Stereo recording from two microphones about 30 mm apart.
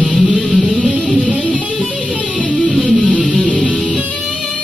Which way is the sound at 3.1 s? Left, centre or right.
Right.